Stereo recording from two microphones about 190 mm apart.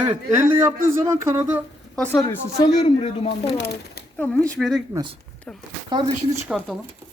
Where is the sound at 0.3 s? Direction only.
10° right (ahead or behind).